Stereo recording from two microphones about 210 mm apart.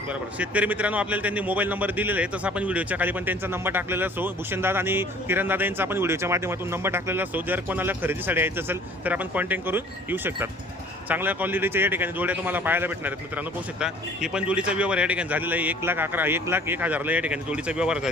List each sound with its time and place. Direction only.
0.1 s speech: 5° right (ahead or behind)